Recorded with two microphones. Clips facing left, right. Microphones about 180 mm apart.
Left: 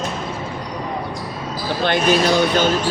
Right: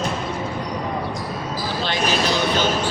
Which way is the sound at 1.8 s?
55° left (ahead or behind).